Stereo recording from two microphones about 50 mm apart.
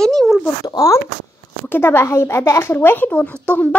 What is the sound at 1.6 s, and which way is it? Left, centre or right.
Speech, left.